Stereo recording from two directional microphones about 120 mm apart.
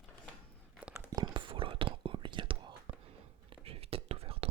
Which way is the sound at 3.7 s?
50° right (ahead or behind).